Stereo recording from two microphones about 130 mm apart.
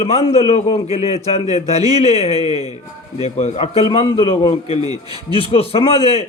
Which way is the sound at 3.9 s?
40° left (ahead or behind).